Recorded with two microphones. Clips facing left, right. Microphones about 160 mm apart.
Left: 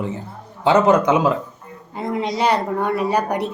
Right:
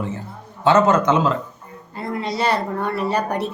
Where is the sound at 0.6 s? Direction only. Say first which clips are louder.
Left 1 dB; 15° left (ahead or behind).